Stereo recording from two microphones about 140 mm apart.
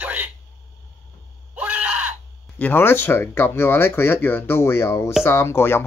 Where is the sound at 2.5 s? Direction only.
15° left (ahead or behind).